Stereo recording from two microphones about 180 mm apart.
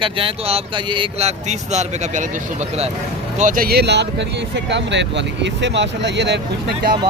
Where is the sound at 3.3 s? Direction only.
45° right (ahead or behind); by 6.4 s 70° right (ahead or behind).